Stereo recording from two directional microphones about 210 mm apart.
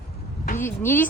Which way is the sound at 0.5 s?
10° left (ahead or behind).